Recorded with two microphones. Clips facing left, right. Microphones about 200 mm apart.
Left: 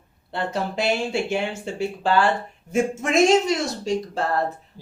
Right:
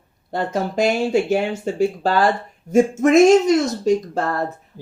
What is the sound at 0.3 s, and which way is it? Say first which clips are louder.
Speech: right 5 dB; 40° right (ahead or behind).